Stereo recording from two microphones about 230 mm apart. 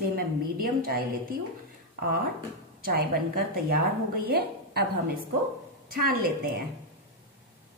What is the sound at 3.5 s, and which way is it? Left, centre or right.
A woman's voice, right.